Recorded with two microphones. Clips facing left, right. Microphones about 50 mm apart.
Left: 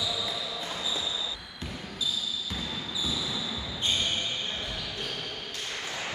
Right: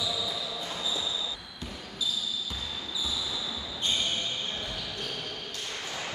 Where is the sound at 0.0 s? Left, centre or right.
Centre.